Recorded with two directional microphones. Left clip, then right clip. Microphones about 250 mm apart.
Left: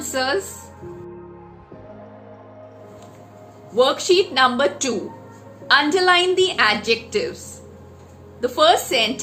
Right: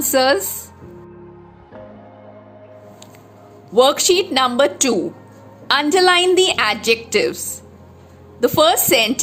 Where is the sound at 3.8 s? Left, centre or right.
Right.